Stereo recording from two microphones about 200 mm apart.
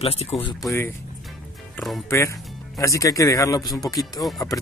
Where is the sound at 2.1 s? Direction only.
15° left (ahead or behind).